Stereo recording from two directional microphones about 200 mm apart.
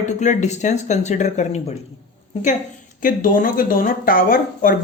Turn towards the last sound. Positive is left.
turn(degrees=45)  # may be behind; listen again after turning